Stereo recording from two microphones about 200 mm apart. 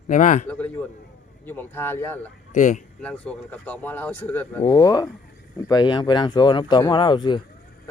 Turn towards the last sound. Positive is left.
turn(degrees=20)  # may be behind; listen again after turning